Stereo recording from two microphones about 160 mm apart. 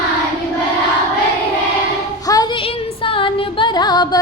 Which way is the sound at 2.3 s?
20° left (ahead or behind).